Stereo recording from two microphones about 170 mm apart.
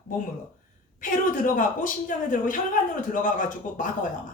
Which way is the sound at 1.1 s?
50° left (ahead or behind).